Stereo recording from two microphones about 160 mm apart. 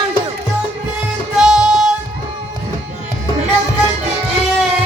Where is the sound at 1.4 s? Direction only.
5° right (ahead or behind).